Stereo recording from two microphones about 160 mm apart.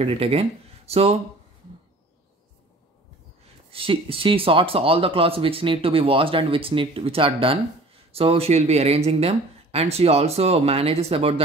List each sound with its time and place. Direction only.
0.0 s speech: 40° right (ahead or behind)
3.7 s speech: 35° right (ahead or behind)